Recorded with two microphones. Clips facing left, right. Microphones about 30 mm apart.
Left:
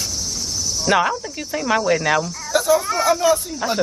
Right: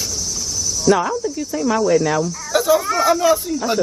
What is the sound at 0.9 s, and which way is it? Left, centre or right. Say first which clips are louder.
A woman's voice: left 3 dB; left.